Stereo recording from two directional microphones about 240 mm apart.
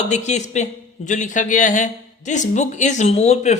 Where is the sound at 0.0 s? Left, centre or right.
Left.